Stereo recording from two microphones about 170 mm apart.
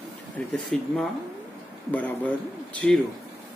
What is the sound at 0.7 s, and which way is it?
Speech, centre (ahead or behind).